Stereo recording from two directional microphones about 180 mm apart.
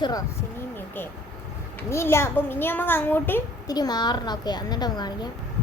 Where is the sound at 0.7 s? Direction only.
10° left (ahead or behind).